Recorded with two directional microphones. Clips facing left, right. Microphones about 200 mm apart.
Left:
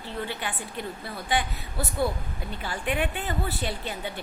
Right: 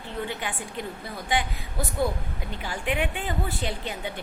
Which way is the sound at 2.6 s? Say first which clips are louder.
Even; 15° right (ahead or behind).